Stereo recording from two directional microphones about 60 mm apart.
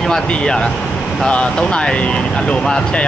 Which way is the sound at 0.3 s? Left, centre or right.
Centre.